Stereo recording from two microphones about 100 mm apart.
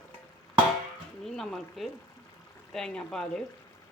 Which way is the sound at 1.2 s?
5° left (ahead or behind).